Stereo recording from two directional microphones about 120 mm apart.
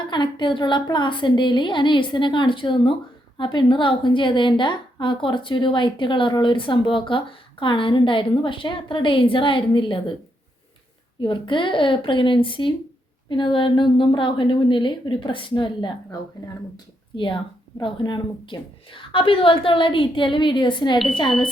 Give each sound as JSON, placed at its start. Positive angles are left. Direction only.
{"t": 0.1, "sound": "a woman's voice", "side_deg": 40}
{"t": 11.2, "sound": "a woman's voice", "side_deg": 45}